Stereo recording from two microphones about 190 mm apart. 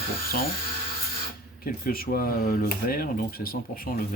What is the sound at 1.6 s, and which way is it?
Speech, 50° left (ahead or behind).